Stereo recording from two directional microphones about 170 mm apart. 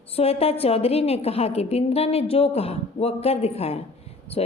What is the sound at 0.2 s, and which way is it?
A woman's voice, 35° left (ahead or behind).